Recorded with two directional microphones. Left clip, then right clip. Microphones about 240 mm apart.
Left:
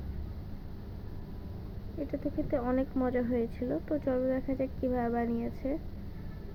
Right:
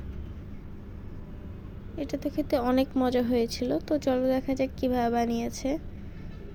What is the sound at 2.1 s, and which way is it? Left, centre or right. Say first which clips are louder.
Speech: right 5 dB; right.